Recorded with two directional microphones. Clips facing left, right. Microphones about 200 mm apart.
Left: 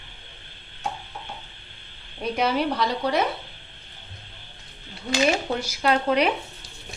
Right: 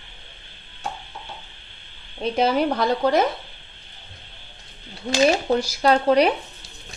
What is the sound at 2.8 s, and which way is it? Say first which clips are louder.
Speech: right 5 dB; 50° right (ahead or behind).